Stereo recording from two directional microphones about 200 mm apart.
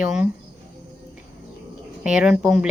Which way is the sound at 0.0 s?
5° right (ahead or behind).